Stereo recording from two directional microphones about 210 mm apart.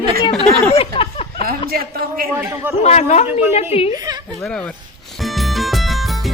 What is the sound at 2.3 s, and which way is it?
Speech, 10° right (ahead or behind).